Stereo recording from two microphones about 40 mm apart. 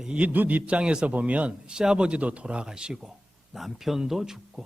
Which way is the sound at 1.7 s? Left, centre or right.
Centre.